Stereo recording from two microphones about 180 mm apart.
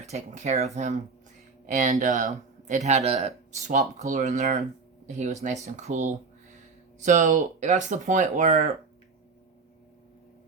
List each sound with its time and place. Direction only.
0.0 s speech: 40° right (ahead or behind)